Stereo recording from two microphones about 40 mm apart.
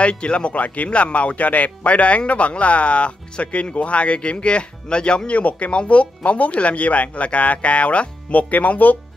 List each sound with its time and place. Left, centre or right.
0.0 s speech: left
5.4 s speech: left